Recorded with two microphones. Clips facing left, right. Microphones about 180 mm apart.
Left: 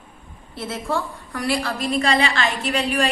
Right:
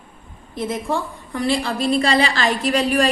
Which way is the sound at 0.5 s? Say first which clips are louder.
Right 2 dB; 15° right (ahead or behind).